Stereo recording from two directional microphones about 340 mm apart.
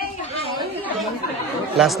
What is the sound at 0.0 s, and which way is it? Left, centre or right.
Chatter, centre.